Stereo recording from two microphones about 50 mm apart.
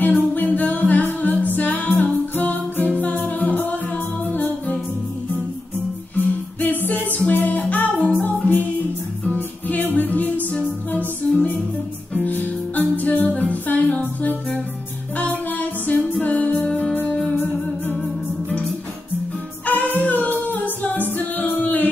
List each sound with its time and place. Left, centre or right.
0.0 s music: left
6.1 s music: left
16.6 s music: centre
16.9 s music: left
19.6 s music: left